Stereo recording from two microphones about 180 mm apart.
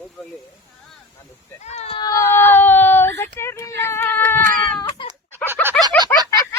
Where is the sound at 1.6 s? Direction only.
35° left (ahead or behind).